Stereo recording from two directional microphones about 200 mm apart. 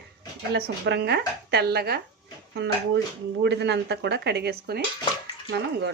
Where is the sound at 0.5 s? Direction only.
55° right (ahead or behind).